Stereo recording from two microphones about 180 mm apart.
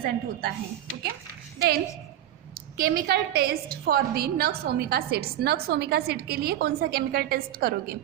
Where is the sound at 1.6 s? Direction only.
60° right (ahead or behind).